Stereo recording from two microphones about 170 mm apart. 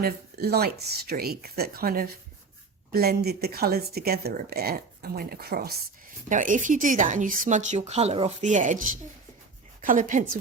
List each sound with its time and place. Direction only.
0.0 s speech: 65° right (ahead or behind)
6.2 s speech: 50° right (ahead or behind)